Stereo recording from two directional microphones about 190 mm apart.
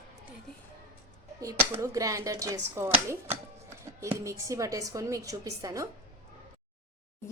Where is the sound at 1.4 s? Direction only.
15° right (ahead or behind).